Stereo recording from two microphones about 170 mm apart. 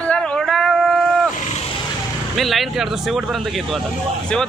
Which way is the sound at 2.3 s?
Centre (ahead or behind).